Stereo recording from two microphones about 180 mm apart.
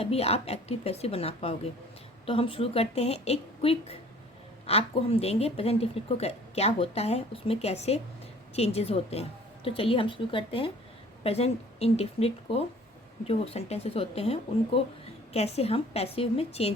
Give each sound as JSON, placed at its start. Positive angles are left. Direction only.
{"t": 0.0, "sound": "a woman's voice", "side_deg": 35}